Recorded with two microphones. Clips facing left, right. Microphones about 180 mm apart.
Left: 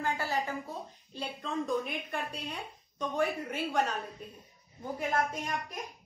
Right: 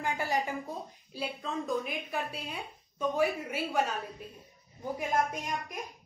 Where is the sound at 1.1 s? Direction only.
5° right (ahead or behind).